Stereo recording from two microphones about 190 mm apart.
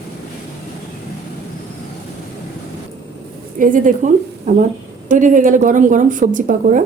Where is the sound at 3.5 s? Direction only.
45° right (ahead or behind).